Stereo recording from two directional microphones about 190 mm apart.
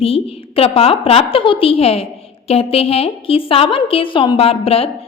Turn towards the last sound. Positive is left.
turn(degrees=30)  # may be behind; listen again after turning